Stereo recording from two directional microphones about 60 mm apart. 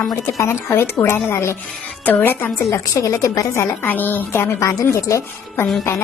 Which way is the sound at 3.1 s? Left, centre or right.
Left.